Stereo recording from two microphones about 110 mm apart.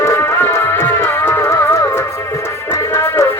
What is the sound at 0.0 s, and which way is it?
Music, 25° left (ahead or behind).